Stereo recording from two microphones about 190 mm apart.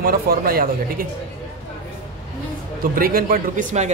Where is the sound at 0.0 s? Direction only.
50° right (ahead or behind).